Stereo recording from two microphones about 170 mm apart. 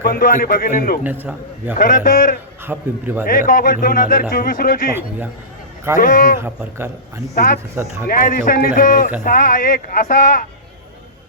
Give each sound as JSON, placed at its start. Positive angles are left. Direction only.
{"t": 0.0, "sound": "speech", "side_deg": 60}
{"t": 1.0, "sound": "a man's voice", "side_deg": -10}
{"t": 1.8, "sound": "speech", "side_deg": 55}
{"t": 2.7, "sound": "a man's voice", "side_deg": -10}
{"t": 3.2, "sound": "speech", "side_deg": 55}
{"t": 6.0, "sound": "speech", "side_deg": 55}
{"t": 6.4, "sound": "a man's voice", "side_deg": -15}
{"t": 7.3, "sound": "speech", "side_deg": 60}